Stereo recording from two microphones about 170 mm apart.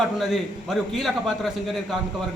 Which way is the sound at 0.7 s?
Centre (ahead or behind).